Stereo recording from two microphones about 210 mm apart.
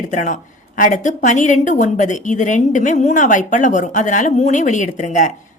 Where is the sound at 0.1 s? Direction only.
35° left (ahead or behind).